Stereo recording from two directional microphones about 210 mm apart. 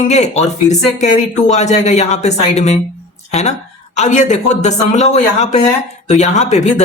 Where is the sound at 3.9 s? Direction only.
35° left (ahead or behind).